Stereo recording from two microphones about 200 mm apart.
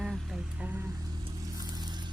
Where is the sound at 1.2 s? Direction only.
20° right (ahead or behind).